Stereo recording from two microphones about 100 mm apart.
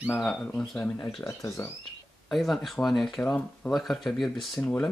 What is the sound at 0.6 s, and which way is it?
Speech, 15° left (ahead or behind).